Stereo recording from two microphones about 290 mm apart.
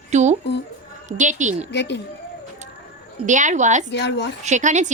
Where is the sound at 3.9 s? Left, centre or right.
Left.